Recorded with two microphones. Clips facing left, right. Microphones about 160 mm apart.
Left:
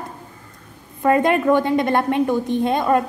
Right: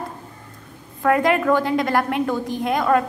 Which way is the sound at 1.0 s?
20° left (ahead or behind).